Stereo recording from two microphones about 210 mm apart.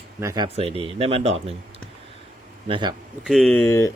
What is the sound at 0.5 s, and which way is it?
Speech, 25° right (ahead or behind).